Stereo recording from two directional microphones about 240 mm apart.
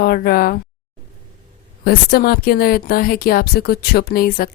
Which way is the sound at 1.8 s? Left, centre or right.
Left.